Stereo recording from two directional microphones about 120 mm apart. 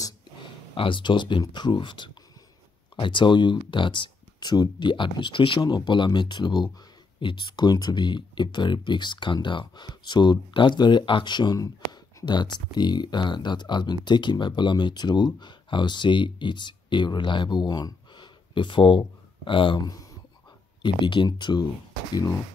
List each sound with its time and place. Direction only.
0.7 s speech: 45° left (ahead or behind)